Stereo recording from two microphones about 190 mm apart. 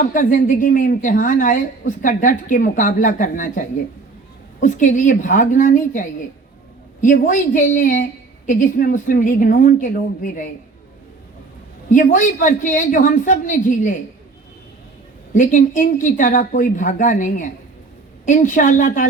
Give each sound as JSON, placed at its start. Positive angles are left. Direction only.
{"t": 0.0, "sound": "speech", "side_deg": 45}
{"t": 11.9, "sound": "speech", "side_deg": 45}
{"t": 15.3, "sound": "speech", "side_deg": 45}